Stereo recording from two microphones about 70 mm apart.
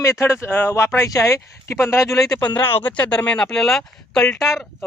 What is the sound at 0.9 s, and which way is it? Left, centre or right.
Speech, left.